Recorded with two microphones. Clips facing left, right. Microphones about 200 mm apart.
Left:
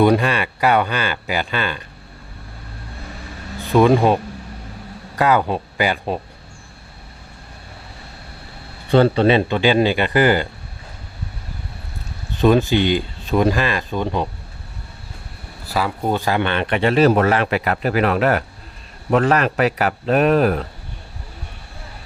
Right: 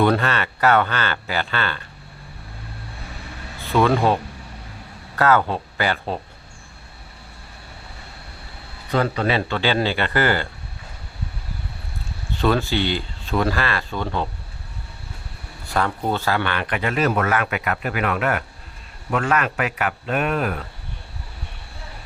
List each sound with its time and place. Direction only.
0.0 s speech: 15° left (ahead or behind)
3.7 s speech: 15° left (ahead or behind)
8.9 s speech: 30° left (ahead or behind)
12.4 s speech: 15° left (ahead or behind)
15.6 s a man's voice: 5° left (ahead or behind); by 20.7 s 35° left (ahead or behind)